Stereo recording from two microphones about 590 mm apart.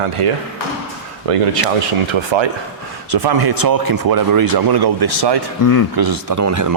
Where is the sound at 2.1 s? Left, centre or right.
Right.